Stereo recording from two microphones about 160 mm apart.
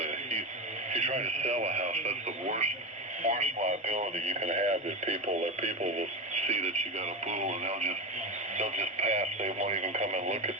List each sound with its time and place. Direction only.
0.0 s radio: 40° right (ahead or behind)
0.9 s speech: 45° right (ahead or behind)